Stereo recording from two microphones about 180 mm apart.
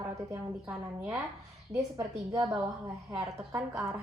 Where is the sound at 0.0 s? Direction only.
20° right (ahead or behind).